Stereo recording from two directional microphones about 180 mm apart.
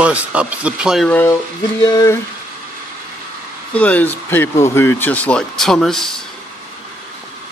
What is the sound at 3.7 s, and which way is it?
Speech, 5° left (ahead or behind).